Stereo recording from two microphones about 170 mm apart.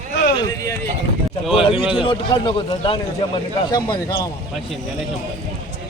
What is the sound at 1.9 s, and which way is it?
Speech, 30° left (ahead or behind).